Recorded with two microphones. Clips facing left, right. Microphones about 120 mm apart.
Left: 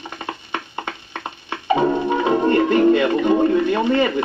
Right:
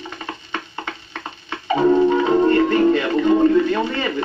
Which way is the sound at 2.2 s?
15° left (ahead or behind).